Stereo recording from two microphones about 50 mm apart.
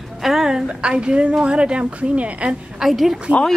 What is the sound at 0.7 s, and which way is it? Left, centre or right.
Speech, right.